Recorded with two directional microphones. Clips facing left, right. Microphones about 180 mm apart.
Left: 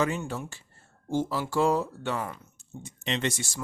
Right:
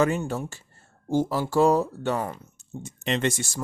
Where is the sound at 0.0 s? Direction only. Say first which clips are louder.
Right 5 dB; 45° right (ahead or behind).